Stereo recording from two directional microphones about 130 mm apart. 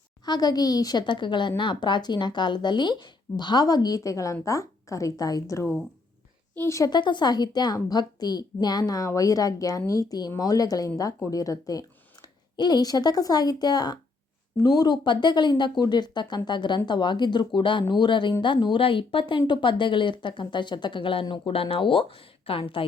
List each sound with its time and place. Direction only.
0.3 s a woman's voice: 30° left (ahead or behind)